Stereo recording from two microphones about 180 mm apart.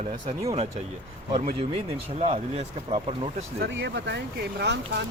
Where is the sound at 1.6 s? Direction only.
30° right (ahead or behind).